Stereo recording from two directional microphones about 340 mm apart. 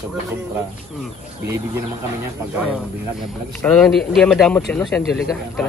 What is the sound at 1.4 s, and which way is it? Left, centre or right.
Speech, centre.